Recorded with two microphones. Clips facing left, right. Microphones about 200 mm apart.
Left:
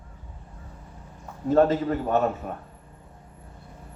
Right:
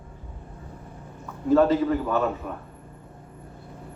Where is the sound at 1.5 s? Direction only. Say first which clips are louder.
Right 1 dB; 40° left (ahead or behind).